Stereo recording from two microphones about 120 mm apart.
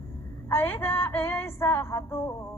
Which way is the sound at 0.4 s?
20° left (ahead or behind).